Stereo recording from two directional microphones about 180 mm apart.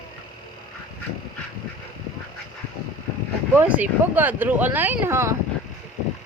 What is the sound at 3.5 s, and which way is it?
Speech, 10° right (ahead or behind).